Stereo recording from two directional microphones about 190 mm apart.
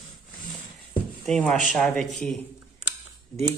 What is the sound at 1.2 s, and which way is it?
A man's voice, 5° left (ahead or behind).